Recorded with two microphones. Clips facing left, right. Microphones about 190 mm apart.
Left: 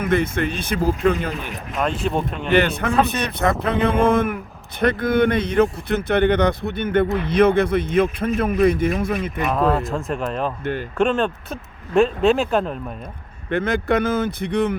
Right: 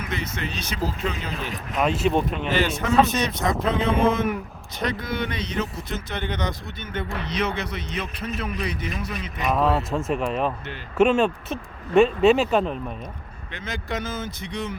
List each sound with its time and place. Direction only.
0.0 s speech: 55° left (ahead or behind)
1.8 s speech: centre (ahead or behind)
2.5 s speech: 60° left (ahead or behind)
9.5 s speech: 5° right (ahead or behind)
13.5 s speech: 55° left (ahead or behind)